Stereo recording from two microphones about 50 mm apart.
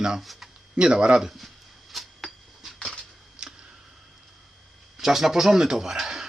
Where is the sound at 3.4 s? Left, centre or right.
Centre.